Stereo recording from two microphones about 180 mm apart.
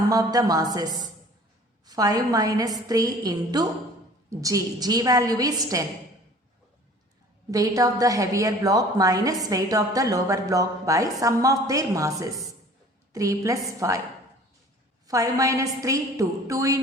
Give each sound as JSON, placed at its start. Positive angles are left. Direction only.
{"t": 0.1, "sound": "a woman's voice", "side_deg": -20}
{"t": 7.5, "sound": "a woman's voice", "side_deg": -20}
{"t": 15.0, "sound": "a woman's voice", "side_deg": -20}